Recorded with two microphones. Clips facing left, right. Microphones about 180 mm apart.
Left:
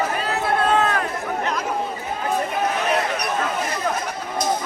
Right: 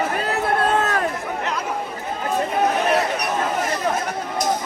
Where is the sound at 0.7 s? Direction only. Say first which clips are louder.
Left 1 dB; 45° right (ahead or behind).